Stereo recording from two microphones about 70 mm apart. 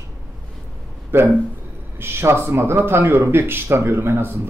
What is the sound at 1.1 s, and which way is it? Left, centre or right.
Speech, right.